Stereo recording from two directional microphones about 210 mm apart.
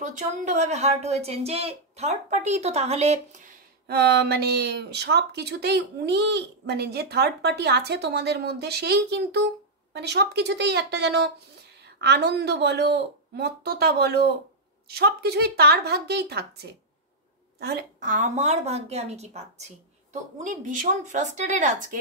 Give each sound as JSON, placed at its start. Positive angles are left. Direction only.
{"t": 0.0, "sound": "a woman's voice", "side_deg": -35}
{"t": 3.8, "sound": "speech", "side_deg": -50}
{"t": 17.6, "sound": "a woman's voice", "side_deg": -50}